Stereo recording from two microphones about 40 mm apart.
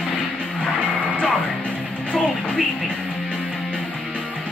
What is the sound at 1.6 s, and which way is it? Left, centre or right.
Music, left.